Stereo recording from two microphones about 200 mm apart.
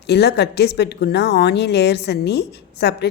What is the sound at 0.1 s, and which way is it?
A woman's voice, 55° left (ahead or behind).